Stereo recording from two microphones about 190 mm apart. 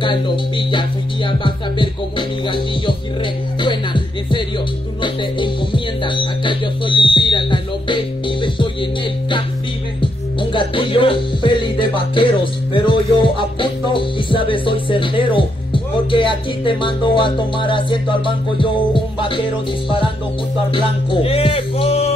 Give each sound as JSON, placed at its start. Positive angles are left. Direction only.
{"t": 0.0, "sound": "music", "side_deg": 25}
{"t": 3.6, "sound": "speech", "side_deg": 25}
{"t": 5.0, "sound": "music", "side_deg": 25}
{"t": 10.5, "sound": "music", "side_deg": 25}
{"t": 20.7, "sound": "music", "side_deg": 30}